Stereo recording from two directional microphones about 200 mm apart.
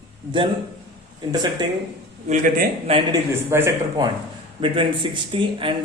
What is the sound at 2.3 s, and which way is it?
Speech, 40° right (ahead or behind).